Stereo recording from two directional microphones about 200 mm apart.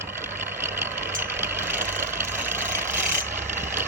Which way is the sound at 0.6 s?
10° right (ahead or behind).